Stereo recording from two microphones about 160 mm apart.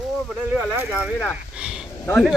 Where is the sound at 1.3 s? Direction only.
5° right (ahead or behind).